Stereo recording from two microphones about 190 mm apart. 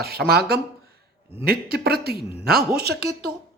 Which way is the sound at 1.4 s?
55° right (ahead or behind).